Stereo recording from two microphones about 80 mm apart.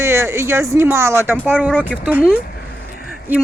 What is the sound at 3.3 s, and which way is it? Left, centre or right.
Speech, right.